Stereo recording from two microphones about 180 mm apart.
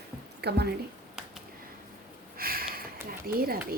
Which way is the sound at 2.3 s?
55° right (ahead or behind).